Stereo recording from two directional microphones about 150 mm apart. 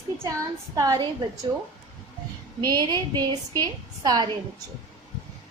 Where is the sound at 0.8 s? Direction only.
25° right (ahead or behind).